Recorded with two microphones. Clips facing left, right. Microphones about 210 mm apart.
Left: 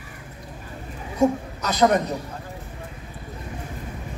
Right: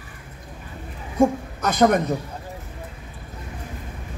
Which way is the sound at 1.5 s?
50° right (ahead or behind).